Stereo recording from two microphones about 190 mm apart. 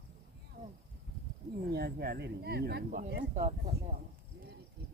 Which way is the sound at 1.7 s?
55° right (ahead or behind).